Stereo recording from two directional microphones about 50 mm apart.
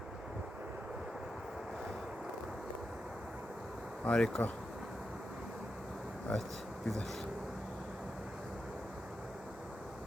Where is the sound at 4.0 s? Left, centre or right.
Left.